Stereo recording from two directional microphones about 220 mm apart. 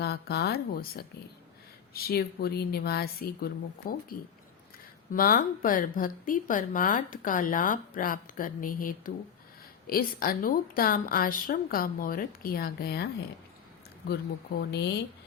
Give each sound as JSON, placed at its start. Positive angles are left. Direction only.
{"t": 0.0, "sound": "a woman's voice", "side_deg": 45}
{"t": 14.1, "sound": "a woman's voice", "side_deg": 50}